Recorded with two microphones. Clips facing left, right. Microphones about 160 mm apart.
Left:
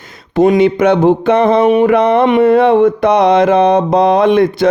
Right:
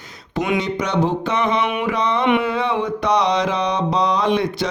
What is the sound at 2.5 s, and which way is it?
Mantra, 55° left (ahead or behind).